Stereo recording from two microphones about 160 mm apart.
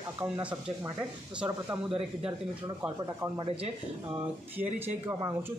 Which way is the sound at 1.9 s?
35° right (ahead or behind).